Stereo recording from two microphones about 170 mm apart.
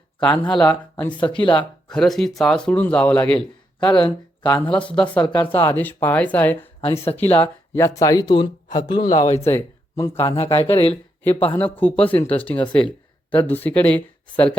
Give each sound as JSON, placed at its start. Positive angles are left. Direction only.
{"t": 0.6, "sound": "speech", "side_deg": 10}
{"t": 1.4, "sound": "speech", "side_deg": 30}
{"t": 1.9, "sound": "a man's voice", "side_deg": 5}
{"t": 3.9, "sound": "speech", "side_deg": 25}
{"t": 4.6, "sound": "speech", "side_deg": 5}
{"t": 6.8, "sound": "speech", "side_deg": 35}
{"t": 7.2, "sound": "speech", "side_deg": 10}
{"t": 9.0, "sound": "speech", "side_deg": 50}
{"t": 9.3, "sound": "speech", "side_deg": 15}
{"t": 10.3, "sound": "speech", "side_deg": 35}
{"t": 11.2, "sound": "speech", "side_deg": 10}